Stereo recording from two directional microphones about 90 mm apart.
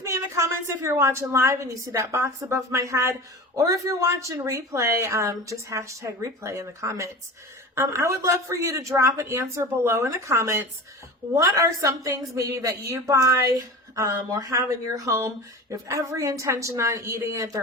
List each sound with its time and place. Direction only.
0.0 s a woman's voice: 35° right (ahead or behind)